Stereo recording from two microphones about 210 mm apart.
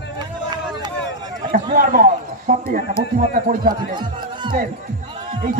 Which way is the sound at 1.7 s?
40° right (ahead or behind).